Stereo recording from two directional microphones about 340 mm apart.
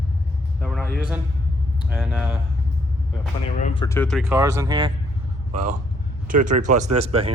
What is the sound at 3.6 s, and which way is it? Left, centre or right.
Speech, centre.